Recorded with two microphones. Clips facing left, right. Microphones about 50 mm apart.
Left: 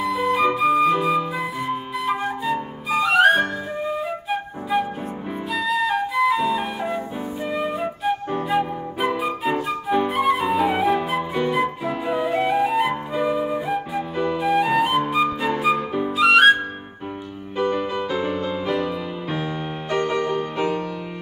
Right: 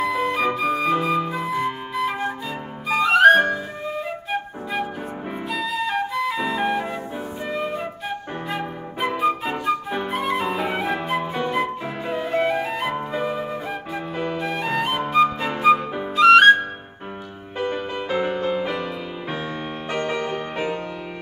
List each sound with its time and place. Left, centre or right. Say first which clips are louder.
0.0 s music: left 2 dB; centre
0.6 s flute: left 3 dB; centre
5.5 s flute: left 3 dB; centre
17.6 s music: left 3 dB; centre
18.1 s music: right 6 dB; right